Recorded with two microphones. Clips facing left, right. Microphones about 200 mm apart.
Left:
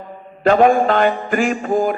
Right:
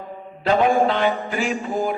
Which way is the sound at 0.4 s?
50° left (ahead or behind).